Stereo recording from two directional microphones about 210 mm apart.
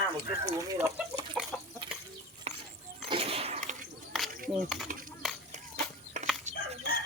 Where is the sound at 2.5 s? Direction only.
30° right (ahead or behind).